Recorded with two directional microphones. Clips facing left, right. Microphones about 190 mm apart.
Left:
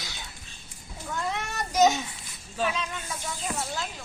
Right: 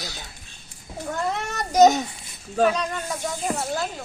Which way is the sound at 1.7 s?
40° right (ahead or behind).